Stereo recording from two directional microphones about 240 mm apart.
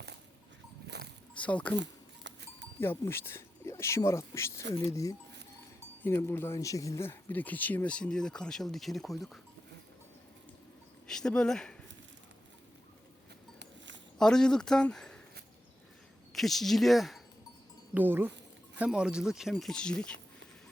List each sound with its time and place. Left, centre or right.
0.9 s a sound: right
1.4 s speech: centre
2.3 s livestock: right
2.8 s speech: centre
11.0 s speech: centre
13.6 s a sound: right
14.2 s speech: centre
16.3 s speech: centre